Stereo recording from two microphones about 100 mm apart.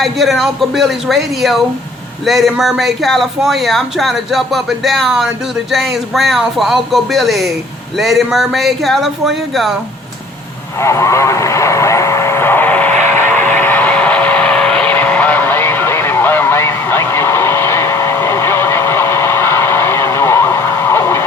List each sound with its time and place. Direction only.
0.0 s speech: centre (ahead or behind)
10.8 s vehicle: 30° left (ahead or behind)